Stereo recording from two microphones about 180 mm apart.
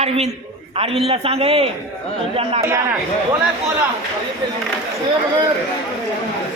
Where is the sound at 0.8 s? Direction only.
30° right (ahead or behind).